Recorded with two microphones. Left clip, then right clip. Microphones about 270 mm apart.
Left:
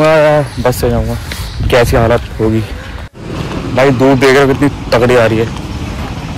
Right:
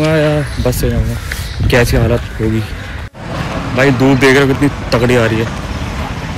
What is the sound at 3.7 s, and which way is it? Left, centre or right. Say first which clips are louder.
A man's voice: left 3 dB; centre.